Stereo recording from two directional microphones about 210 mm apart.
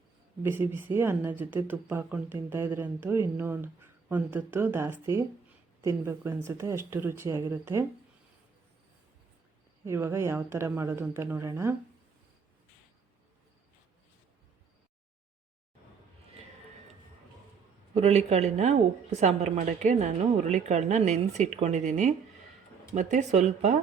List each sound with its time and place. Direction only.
0.4 s speech: 10° right (ahead or behind)
9.8 s speech: 10° right (ahead or behind)
17.9 s a woman's voice: 30° right (ahead or behind)